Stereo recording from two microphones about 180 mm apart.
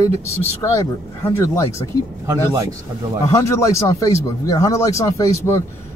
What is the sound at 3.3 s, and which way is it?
Speech, 15° left (ahead or behind).